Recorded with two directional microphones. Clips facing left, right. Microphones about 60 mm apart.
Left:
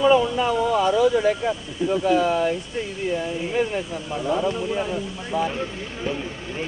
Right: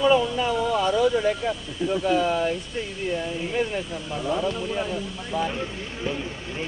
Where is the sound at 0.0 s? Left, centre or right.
Centre.